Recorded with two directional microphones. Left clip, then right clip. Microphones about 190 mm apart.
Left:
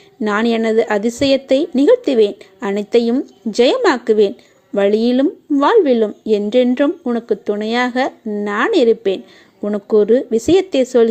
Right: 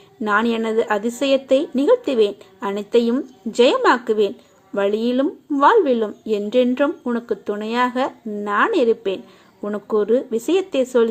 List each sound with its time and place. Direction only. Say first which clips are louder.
0.2 s a woman's voice: left 2 dB; 30° left (ahead or behind)